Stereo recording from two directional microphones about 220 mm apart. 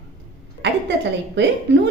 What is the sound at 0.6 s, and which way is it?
Speech, 50° right (ahead or behind).